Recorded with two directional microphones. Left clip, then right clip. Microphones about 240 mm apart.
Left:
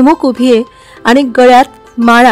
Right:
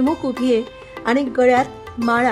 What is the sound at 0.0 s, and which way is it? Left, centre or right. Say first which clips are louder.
Speech: left 12 dB; left.